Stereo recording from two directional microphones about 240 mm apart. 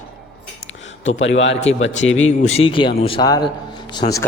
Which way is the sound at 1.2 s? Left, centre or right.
Left.